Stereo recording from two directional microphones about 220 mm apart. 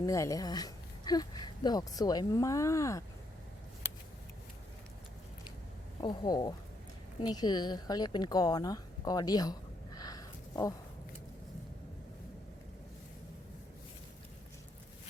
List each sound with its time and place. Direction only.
0.0 s speech: 15° left (ahead or behind)
6.0 s speech: 20° left (ahead or behind)